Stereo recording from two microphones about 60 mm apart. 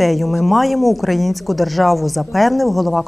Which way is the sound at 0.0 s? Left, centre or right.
Centre.